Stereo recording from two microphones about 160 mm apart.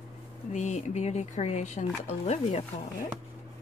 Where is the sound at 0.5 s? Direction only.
45° left (ahead or behind).